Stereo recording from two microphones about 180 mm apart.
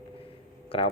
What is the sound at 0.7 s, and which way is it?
Speech, 30° left (ahead or behind).